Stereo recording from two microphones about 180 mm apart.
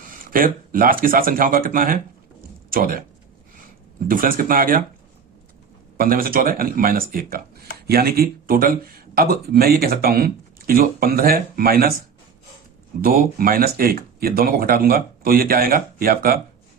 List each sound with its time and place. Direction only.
0.0 s speech: 50° right (ahead or behind)
4.1 s speech: 50° right (ahead or behind)
6.0 s speech: 55° right (ahead or behind)
13.0 s speech: 55° right (ahead or behind)